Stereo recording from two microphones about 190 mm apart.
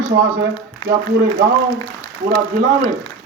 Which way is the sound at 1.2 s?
45° right (ahead or behind).